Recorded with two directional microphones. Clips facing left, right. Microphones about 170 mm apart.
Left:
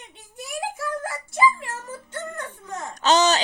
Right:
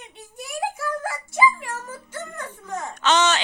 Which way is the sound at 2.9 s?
35° left (ahead or behind).